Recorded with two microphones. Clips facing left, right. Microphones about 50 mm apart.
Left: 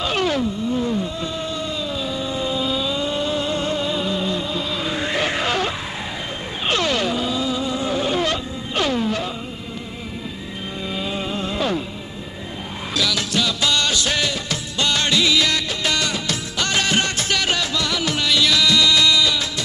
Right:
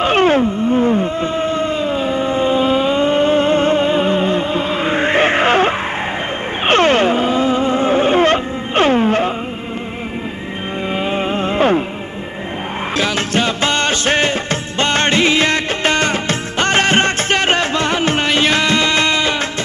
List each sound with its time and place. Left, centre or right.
0.0 s wail: right
6.6 s music: right
10.9 s music: right
12.9 s music: right